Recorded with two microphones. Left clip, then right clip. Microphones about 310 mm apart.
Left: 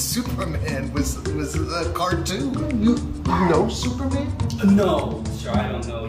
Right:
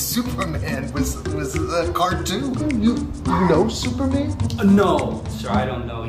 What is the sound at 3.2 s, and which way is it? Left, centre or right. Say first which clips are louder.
Speech: right 2 dB; centre.